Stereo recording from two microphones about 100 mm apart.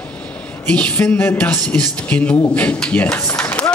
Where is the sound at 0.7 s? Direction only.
15° left (ahead or behind).